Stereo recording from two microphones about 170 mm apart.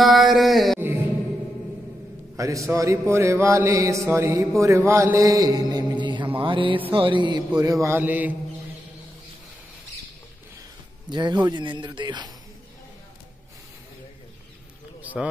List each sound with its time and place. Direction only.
0.0 s a sound: centre (ahead or behind)
2.3 s mantra: 20° right (ahead or behind)
6.9 s speech: 30° right (ahead or behind)
7.6 s mantra: 20° right (ahead or behind)
11.1 s speech: 25° right (ahead or behind)
15.2 s a man's voice: 5° right (ahead or behind)